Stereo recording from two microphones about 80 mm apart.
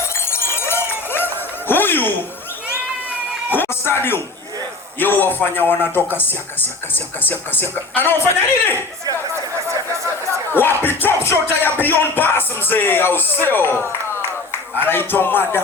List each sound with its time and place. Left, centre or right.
0.3 s a sound: left
3.5 s music: left
4.9 s a man's voice: left
10.5 s a man's voice: left